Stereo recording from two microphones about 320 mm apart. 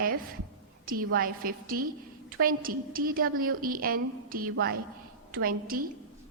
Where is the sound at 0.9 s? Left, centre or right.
Right.